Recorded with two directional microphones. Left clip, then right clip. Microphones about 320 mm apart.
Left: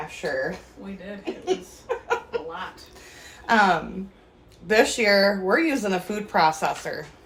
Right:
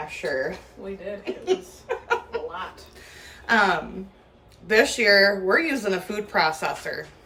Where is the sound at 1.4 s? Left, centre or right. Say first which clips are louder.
Right 2 dB; centre.